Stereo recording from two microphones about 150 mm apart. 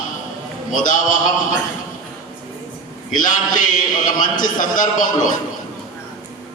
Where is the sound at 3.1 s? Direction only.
60° left (ahead or behind).